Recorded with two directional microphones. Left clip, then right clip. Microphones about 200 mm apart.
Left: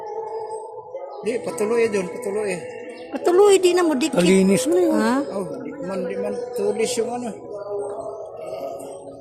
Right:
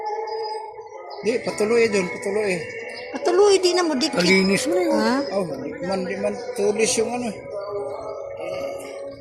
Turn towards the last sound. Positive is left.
turn(degrees=-15)  # may be behind; listen again after turning